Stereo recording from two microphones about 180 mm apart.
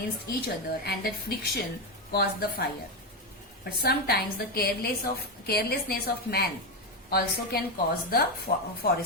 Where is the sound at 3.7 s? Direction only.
55° left (ahead or behind).